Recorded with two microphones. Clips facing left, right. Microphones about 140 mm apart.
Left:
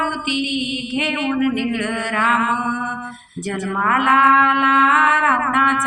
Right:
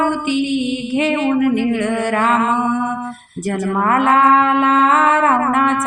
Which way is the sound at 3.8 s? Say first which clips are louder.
Right 3 dB; 35° right (ahead or behind).